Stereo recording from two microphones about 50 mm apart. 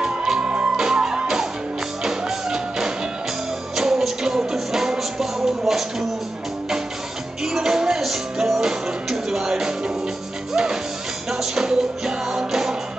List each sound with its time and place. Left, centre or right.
0.0 s music: centre
7.4 s music: centre